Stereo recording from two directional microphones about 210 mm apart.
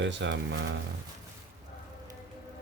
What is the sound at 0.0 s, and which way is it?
Speech, 60° right (ahead or behind).